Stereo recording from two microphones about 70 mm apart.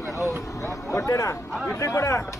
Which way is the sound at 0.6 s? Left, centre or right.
Left.